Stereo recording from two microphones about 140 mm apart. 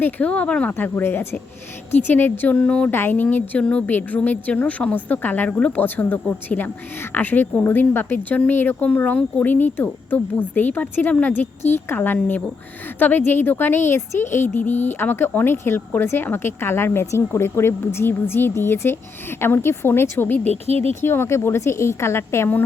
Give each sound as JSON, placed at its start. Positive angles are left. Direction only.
{"t": 0.0, "sound": "speech", "side_deg": 10}
{"t": 20.4, "sound": "speech", "side_deg": -50}
{"t": 21.0, "sound": "a woman's voice", "side_deg": 15}